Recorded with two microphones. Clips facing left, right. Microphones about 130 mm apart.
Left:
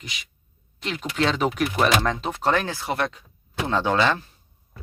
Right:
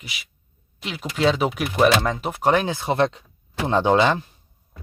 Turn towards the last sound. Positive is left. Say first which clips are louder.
# right 4 dB
turn(degrees=-20)  # may be behind; listen again after turning